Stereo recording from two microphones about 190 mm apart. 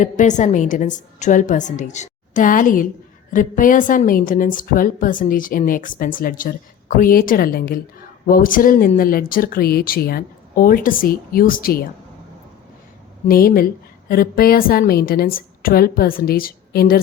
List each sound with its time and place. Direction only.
0.0 s a woman's voice: 40° left (ahead or behind)
13.2 s a woman's voice: 50° left (ahead or behind)